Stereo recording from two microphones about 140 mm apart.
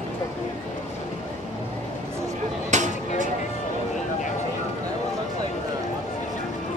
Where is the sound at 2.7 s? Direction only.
60° right (ahead or behind).